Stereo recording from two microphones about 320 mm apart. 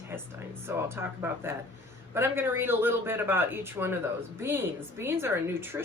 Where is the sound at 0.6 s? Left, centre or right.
Centre.